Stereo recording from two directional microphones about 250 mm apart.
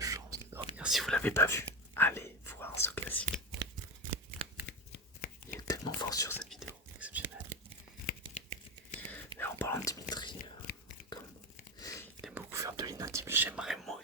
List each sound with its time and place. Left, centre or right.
0.0 s whispering: centre
0.8 s whispering: centre
4.9 s shuffling cards: left
5.6 s whispering: centre
6.6 s whispering: centre
8.0 s tearing: left
9.0 s whispering: centre
11.8 s whispering: centre
12.2 s whispering: centre